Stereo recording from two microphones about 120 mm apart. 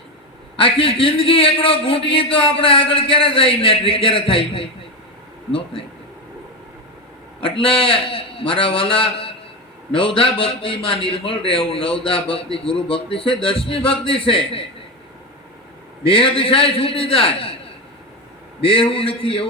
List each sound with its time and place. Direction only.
0.5 s a man's voice: 50° left (ahead or behind)
7.6 s a man's voice: 50° left (ahead or behind)
16.0 s a man's voice: 50° left (ahead or behind)
18.6 s a man's voice: 45° left (ahead or behind)